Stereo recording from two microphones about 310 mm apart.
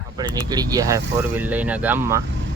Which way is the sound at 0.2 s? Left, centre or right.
Centre.